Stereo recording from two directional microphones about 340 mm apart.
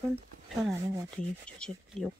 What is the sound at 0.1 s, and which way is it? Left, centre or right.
Speech, centre.